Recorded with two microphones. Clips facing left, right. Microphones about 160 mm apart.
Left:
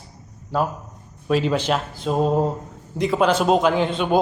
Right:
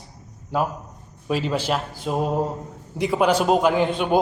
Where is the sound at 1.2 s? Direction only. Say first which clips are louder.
Left 3 dB; 5° right (ahead or behind).